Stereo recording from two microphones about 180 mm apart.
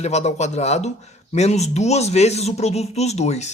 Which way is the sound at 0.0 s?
40° left (ahead or behind).